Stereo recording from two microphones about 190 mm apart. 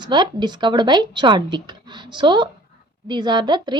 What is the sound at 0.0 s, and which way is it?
A woman's voice, 25° right (ahead or behind).